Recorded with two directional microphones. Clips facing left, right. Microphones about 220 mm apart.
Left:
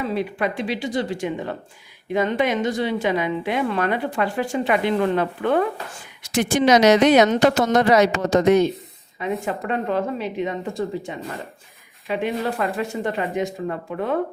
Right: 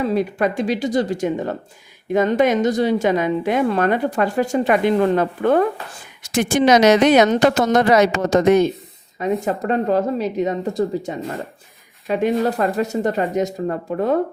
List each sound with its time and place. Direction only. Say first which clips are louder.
0.0 s a woman's voice: right 5 dB; 45° right (ahead or behind)